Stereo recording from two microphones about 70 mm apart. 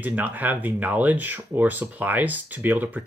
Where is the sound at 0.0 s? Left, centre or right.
Right.